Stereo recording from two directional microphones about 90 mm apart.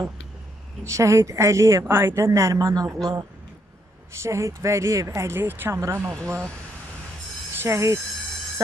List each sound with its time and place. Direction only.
0.8 s a woman's voice: 35° right (ahead or behind)
4.2 s a woman's voice: 35° right (ahead or behind)
7.5 s speech: 30° right (ahead or behind)